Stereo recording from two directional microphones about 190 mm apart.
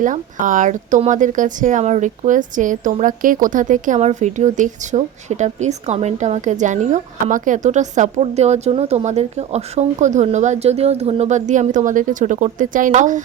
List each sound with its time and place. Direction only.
0.0 s speech: 45° right (ahead or behind)